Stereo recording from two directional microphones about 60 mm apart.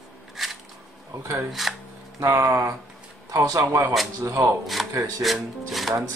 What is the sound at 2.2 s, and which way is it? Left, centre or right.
Speech, right.